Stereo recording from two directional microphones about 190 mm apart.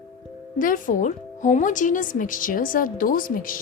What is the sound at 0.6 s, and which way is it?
A woman's voice, 45° left (ahead or behind).